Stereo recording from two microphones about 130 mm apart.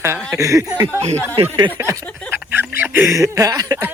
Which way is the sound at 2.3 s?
15° right (ahead or behind).